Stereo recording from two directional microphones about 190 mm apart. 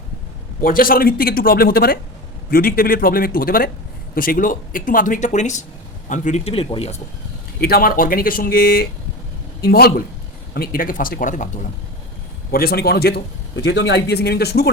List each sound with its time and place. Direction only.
0.6 s speech: 50° left (ahead or behind); by 6.9 s 30° left (ahead or behind)
7.6 s speech: 50° left (ahead or behind)
12.5 s speech: 50° left (ahead or behind)